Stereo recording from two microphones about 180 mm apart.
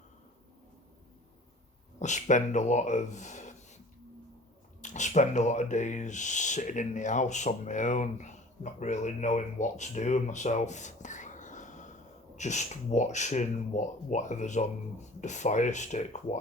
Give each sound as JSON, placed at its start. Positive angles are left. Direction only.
{"t": 2.0, "sound": "speech", "side_deg": 40}
{"t": 4.8, "sound": "speech", "side_deg": 40}